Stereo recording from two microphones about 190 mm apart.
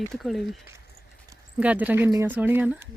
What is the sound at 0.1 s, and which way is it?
Speech, centre (ahead or behind).